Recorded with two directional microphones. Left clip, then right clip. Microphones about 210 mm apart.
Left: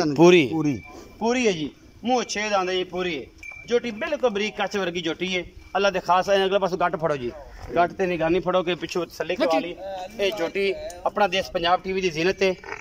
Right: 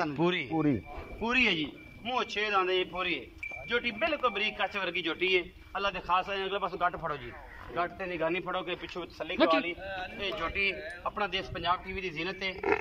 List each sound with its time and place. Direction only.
0.1 s speech: 45° left (ahead or behind)
1.2 s a man's voice: 35° left (ahead or behind); by 12.5 s 55° left (ahead or behind)